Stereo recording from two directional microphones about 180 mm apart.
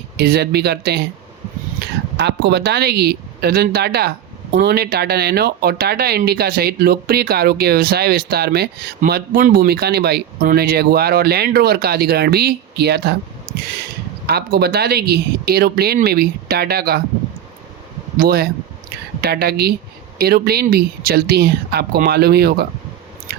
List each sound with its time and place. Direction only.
0.2 s speech: 65° right (ahead or behind)
2.1 s speech: 70° right (ahead or behind)
14.3 s speech: 60° right (ahead or behind)
18.2 s speech: 55° right (ahead or behind)